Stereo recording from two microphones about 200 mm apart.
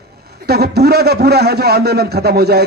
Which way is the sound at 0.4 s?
55° right (ahead or behind).